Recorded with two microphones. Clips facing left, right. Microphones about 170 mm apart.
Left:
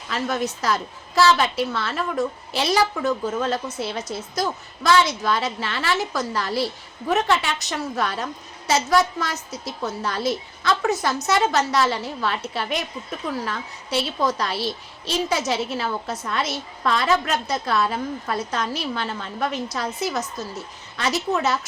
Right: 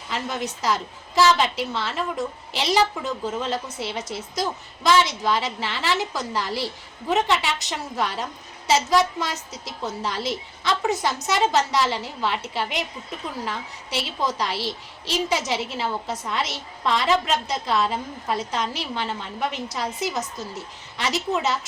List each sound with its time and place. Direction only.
0.1 s a woman's voice: 15° right (ahead or behind)